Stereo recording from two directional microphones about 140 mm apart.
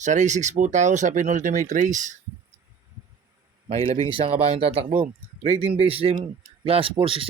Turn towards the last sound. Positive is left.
turn(degrees=-40)  # may be behind; listen again after turning